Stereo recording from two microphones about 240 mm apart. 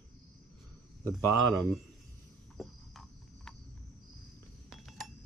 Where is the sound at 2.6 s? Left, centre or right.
Centre.